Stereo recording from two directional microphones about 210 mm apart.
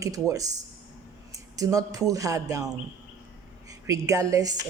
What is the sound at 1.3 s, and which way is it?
A woman's voice, 15° right (ahead or behind).